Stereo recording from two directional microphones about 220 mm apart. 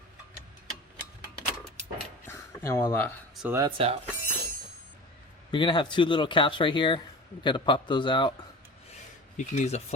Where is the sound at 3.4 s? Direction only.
15° right (ahead or behind).